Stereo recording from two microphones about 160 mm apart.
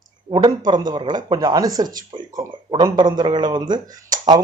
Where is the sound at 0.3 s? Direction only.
25° right (ahead or behind).